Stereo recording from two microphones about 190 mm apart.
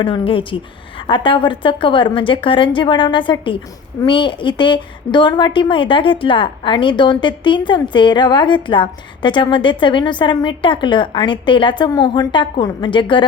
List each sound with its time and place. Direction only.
0.0 s a woman's voice: 25° left (ahead or behind)